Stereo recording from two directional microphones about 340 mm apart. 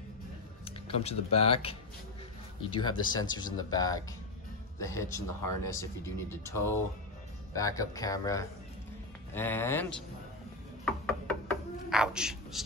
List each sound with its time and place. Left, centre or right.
0.7 s speech: centre
10.9 s a sound: centre
11.9 s speech: centre